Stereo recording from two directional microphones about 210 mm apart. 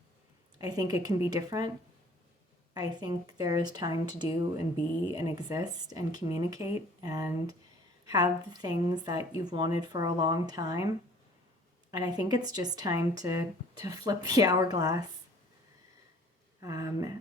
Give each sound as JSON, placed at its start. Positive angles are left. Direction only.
{"t": 0.6, "sound": "speech", "side_deg": -20}
{"t": 2.7, "sound": "speech", "side_deg": -20}
{"t": 11.9, "sound": "speech", "side_deg": -20}
{"t": 16.6, "sound": "speech", "side_deg": -15}